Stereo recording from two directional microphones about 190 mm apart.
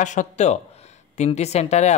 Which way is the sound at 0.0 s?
40° left (ahead or behind).